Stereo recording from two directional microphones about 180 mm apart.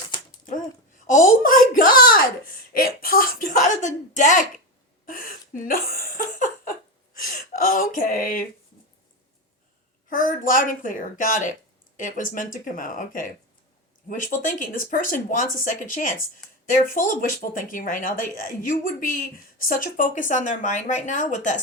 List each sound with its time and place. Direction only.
0.3 s a sound: 45° left (ahead or behind)
1.0 s speech: 50° left (ahead or behind)
10.1 s speech: 50° left (ahead or behind)
14.4 s speech: 50° left (ahead or behind)